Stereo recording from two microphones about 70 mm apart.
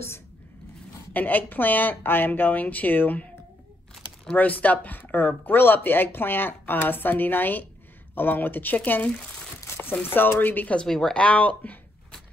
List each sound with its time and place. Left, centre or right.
1.1 s speech: left
4.4 s speech: left
10.9 s speech: centre
11.2 s speech: left